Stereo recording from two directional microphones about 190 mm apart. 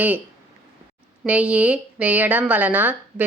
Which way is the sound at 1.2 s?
5° right (ahead or behind).